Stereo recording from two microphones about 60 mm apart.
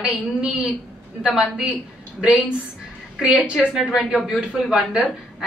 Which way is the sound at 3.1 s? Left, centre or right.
Centre.